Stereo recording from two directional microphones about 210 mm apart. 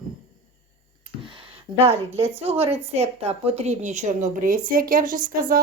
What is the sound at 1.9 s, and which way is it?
A woman's voice, 30° right (ahead or behind).